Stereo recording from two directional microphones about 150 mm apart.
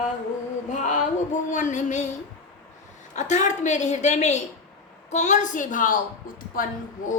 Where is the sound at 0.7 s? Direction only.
55° left (ahead or behind).